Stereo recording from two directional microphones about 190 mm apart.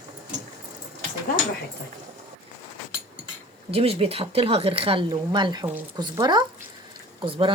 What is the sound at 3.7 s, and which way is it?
Speech, 30° right (ahead or behind).